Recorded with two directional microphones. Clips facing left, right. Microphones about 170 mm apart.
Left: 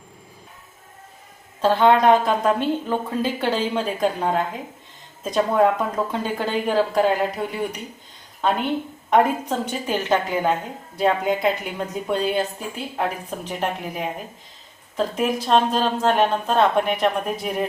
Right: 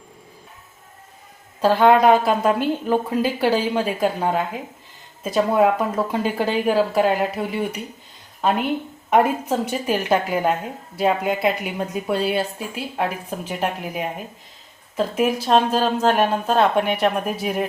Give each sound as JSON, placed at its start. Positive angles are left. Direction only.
{"t": 1.6, "sound": "a woman's voice", "side_deg": -10}